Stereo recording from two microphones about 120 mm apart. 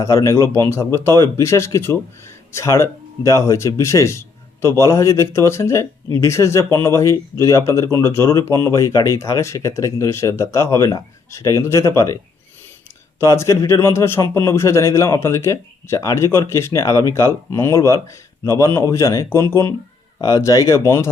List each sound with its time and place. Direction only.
0.0 s speech: 25° left (ahead or behind)
20.2 s speech: 30° left (ahead or behind)